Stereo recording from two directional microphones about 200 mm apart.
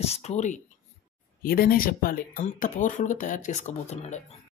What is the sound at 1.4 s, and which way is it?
Speech, 45° left (ahead or behind).